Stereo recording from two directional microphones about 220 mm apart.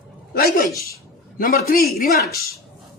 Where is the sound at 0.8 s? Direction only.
40° left (ahead or behind).